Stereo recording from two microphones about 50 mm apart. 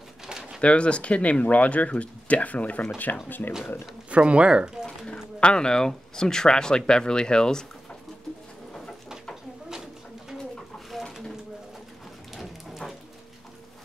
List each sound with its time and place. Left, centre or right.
0.3 s bird: centre
0.6 s speech: left
4.1 s speech: right
4.8 s speech: centre
9.3 s a sound: centre
10.3 s bird: centre
12.4 s dog: centre